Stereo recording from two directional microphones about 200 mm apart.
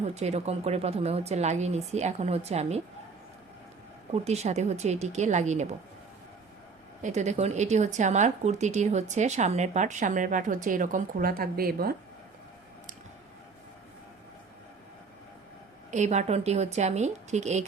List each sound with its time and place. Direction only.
0.0 s speech: 35° right (ahead or behind)
4.1 s speech: 35° right (ahead or behind)
7.0 s speech: 35° right (ahead or behind)
15.9 s speech: 35° right (ahead or behind)